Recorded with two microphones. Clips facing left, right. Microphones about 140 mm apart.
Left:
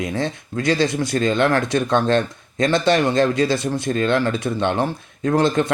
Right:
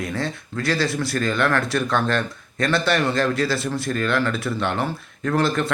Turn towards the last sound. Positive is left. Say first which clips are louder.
# left 4 dB
turn(degrees=20)  # may be behind; listen again after turning